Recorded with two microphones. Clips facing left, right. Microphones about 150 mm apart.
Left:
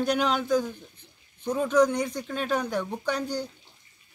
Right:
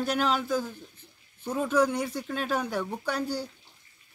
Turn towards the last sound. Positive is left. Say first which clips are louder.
# left 1 dB
turn(degrees=-5)  # may be behind; listen again after turning